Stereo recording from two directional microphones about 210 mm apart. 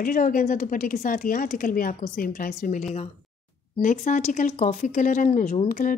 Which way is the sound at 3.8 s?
35° left (ahead or behind).